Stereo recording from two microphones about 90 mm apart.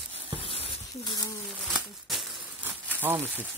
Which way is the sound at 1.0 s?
55° left (ahead or behind).